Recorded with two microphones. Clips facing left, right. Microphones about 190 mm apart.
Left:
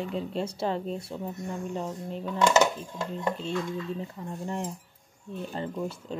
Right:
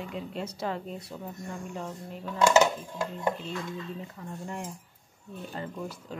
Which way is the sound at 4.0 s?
30° left (ahead or behind).